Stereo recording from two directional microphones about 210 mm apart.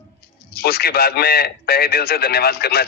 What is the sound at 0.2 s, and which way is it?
A man's voice, 50° left (ahead or behind).